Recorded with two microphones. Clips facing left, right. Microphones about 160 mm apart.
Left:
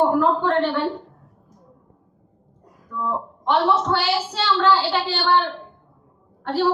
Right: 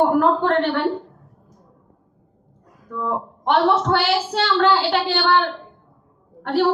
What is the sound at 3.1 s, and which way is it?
A woman's voice, 60° right (ahead or behind).